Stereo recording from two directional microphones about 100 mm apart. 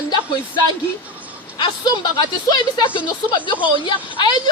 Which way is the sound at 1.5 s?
45° left (ahead or behind).